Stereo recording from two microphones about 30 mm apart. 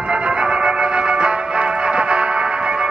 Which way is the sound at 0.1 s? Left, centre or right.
Right.